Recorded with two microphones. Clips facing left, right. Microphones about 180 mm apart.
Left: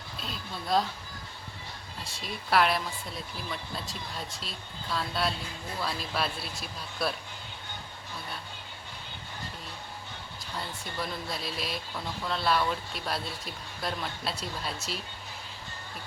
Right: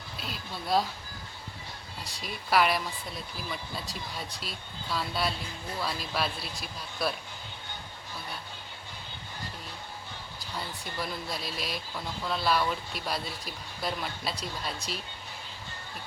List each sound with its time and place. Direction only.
0.2 s speech: 5° right (ahead or behind)
2.2 s speech: centre (ahead or behind)
10.9 s speech: centre (ahead or behind)